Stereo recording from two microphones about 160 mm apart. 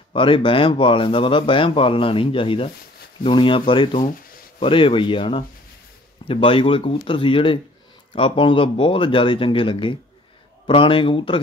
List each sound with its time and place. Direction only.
0.1 s speech: 30° left (ahead or behind)